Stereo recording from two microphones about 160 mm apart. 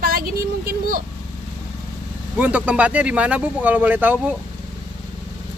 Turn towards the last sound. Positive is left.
turn(degrees=-10)  # may be behind; listen again after turning